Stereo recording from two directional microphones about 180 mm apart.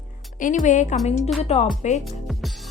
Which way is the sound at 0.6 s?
45° left (ahead or behind).